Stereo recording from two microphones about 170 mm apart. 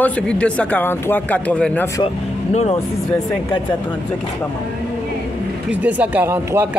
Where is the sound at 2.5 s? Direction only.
40° left (ahead or behind).